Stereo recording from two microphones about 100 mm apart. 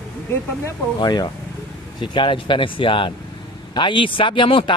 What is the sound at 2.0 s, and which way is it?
Speech, 55° left (ahead or behind).